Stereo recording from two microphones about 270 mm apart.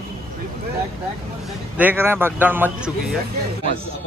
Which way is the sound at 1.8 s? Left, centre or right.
Centre.